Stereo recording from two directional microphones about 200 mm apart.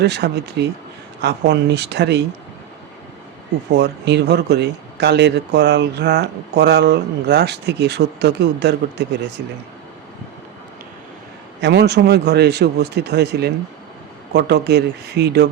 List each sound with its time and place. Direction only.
0.0 s speech: 55° right (ahead or behind)
3.7 s speech: 60° right (ahead or behind)
11.6 s speech: 55° right (ahead or behind)